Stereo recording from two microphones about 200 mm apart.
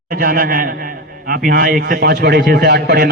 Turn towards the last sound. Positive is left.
turn(degrees=-55)  # may be behind; listen again after turning